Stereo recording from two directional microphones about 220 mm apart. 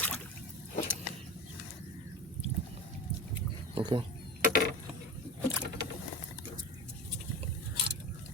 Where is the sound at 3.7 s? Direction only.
20° right (ahead or behind).